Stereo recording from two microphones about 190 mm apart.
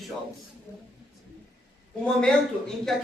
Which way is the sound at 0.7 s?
15° left (ahead or behind).